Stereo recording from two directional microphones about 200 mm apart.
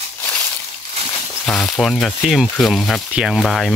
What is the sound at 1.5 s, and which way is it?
Speech, 5° left (ahead or behind).